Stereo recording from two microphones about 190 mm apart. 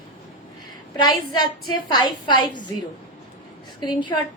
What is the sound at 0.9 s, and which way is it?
A woman's voice, 20° left (ahead or behind).